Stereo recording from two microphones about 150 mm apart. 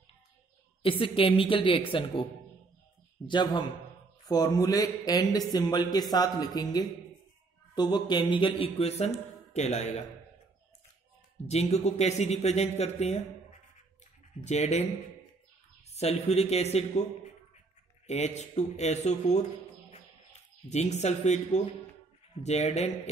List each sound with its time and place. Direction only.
0.8 s speech: 35° left (ahead or behind)
3.3 s a man's voice: 30° left (ahead or behind); by 10.0 s 50° left (ahead or behind)
11.4 s speech: 45° left (ahead or behind)
14.4 s speech: 50° left (ahead or behind)
15.9 s speech: 45° left (ahead or behind)
18.0 s speech: 50° left (ahead or behind)
20.6 s speech: 50° left (ahead or behind)